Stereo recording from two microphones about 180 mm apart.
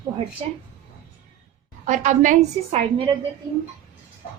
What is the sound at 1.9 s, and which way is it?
Speech, 40° right (ahead or behind).